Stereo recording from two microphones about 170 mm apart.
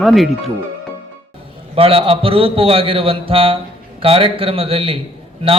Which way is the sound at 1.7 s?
35° right (ahead or behind).